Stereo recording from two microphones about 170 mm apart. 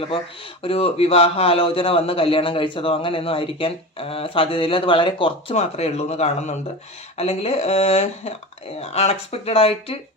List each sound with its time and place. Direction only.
0.6 s speech: 35° left (ahead or behind)